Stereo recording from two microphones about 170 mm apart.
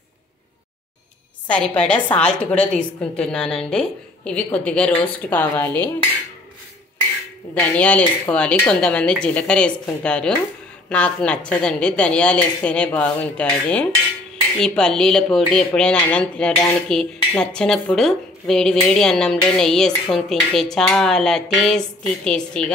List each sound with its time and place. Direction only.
1.8 s a woman's voice: 5° left (ahead or behind)
7.5 s a woman's voice: 10° left (ahead or behind)